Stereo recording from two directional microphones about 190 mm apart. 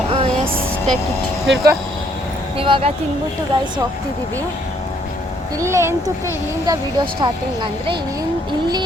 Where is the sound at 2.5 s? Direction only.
25° right (ahead or behind).